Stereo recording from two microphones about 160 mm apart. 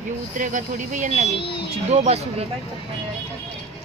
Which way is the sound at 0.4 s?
55° right (ahead or behind).